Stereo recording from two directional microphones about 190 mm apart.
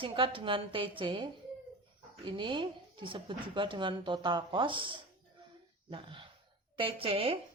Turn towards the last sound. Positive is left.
turn(degrees=-30)  # may be behind; listen again after turning